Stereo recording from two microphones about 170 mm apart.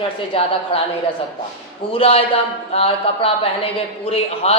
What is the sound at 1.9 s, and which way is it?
A man's voice, 35° left (ahead or behind).